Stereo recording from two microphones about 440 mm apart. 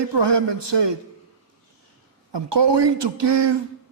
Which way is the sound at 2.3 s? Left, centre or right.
Right.